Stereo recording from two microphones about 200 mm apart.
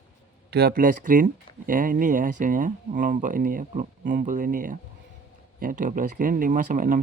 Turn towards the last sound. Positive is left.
turn(degrees=-40)  # may be behind; listen again after turning